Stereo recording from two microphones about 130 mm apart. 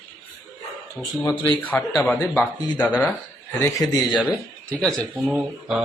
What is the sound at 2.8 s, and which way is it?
Speech, 5° left (ahead or behind).